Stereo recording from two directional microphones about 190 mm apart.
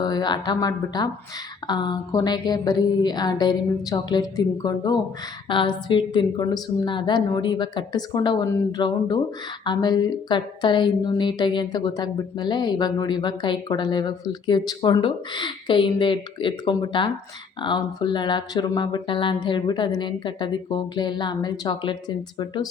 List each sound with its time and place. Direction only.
0.0 s a woman's voice: 20° left (ahead or behind)